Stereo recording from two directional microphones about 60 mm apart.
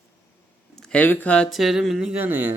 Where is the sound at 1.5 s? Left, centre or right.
Centre.